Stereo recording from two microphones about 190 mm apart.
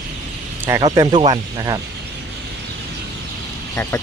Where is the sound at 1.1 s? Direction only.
30° right (ahead or behind).